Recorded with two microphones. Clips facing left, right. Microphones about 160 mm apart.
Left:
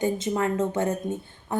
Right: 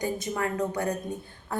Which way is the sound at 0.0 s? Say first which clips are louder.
Left 4 dB; 25° left (ahead or behind).